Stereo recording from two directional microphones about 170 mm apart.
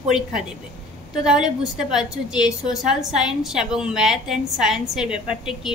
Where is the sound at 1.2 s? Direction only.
5° right (ahead or behind).